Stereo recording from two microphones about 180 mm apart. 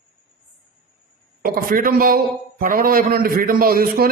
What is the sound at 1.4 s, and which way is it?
A man's voice, 55° right (ahead or behind).